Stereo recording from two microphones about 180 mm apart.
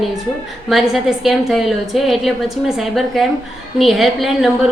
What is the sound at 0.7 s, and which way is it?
A woman's voice, centre (ahead or behind).